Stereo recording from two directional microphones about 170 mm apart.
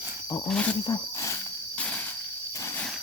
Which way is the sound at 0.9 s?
20° left (ahead or behind).